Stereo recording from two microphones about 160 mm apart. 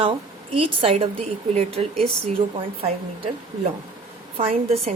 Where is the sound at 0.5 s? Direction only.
35° right (ahead or behind).